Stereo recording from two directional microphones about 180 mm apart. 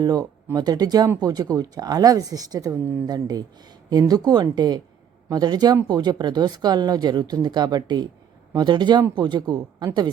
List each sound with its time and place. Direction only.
0.0 s speech: 20° right (ahead or behind)